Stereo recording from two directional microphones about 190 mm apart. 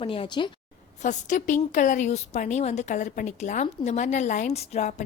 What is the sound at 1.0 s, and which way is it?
A woman's voice, 40° left (ahead or behind).